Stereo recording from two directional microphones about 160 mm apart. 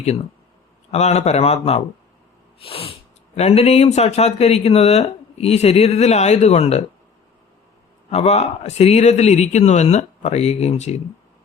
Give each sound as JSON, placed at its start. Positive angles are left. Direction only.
{"t": 0.9, "sound": "a man's voice", "side_deg": 45}
{"t": 8.1, "sound": "a man's voice", "side_deg": 45}